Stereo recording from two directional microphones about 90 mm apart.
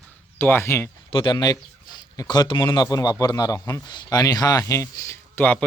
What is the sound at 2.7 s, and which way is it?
A man's voice, 45° left (ahead or behind).